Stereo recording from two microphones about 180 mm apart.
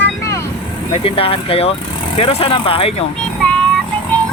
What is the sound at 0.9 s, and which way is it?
Speech, 30° left (ahead or behind).